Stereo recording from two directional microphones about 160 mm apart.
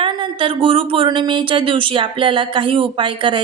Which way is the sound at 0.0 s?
30° right (ahead or behind).